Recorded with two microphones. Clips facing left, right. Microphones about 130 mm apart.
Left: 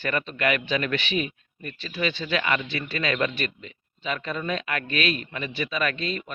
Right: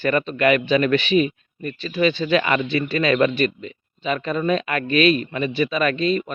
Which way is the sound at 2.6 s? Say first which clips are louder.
Right 8 dB; 25° right (ahead or behind).